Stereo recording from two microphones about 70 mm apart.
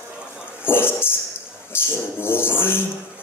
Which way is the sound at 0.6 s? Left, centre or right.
Left.